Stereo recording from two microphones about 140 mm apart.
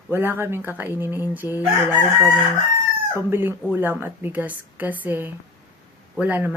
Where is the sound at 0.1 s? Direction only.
15° right (ahead or behind).